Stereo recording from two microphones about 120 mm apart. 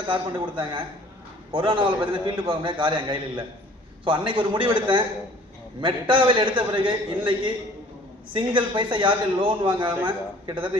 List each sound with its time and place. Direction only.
0.0 s a man's voice: 45° right (ahead or behind)